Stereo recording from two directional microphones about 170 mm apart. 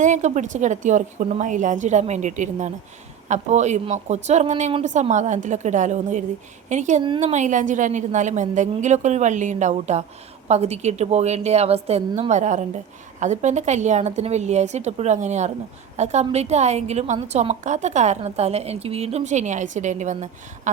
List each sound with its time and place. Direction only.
0.0 s a woman's voice: 45° right (ahead or behind)